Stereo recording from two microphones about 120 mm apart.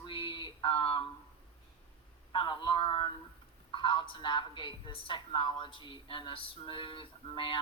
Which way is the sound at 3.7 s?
45° left (ahead or behind).